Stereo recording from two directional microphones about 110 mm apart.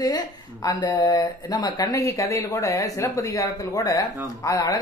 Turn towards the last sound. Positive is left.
turn(degrees=30)  # may be behind; listen again after turning